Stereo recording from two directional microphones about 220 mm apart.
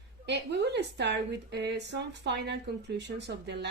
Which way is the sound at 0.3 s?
50° right (ahead or behind).